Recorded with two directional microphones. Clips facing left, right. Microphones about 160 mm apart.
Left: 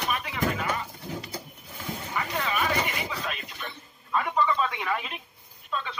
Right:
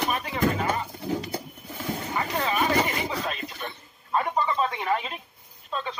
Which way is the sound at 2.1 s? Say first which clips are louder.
Right 2 dB; 35° right (ahead or behind).